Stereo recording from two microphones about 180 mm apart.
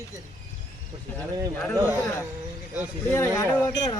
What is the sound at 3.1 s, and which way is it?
Speech, 15° left (ahead or behind).